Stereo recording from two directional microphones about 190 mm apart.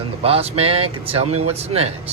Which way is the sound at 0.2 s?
30° right (ahead or behind).